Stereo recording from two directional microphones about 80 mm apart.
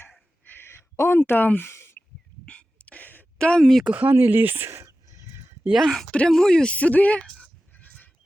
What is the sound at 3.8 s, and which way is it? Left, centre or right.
Speech, centre.